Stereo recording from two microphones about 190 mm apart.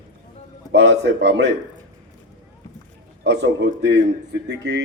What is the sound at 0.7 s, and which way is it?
Speech, 65° right (ahead or behind).